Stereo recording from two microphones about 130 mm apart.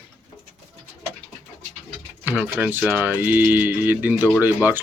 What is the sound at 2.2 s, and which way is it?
Speech, 10° right (ahead or behind).